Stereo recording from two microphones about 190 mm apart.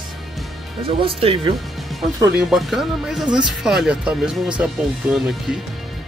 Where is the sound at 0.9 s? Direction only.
25° right (ahead or behind).